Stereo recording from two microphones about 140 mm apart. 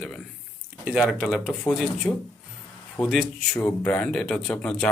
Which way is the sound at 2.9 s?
Centre (ahead or behind).